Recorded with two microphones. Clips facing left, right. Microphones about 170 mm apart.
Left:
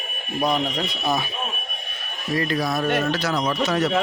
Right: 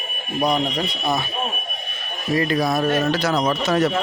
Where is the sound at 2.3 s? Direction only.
10° right (ahead or behind).